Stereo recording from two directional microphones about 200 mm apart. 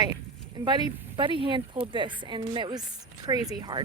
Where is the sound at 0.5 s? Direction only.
20° right (ahead or behind).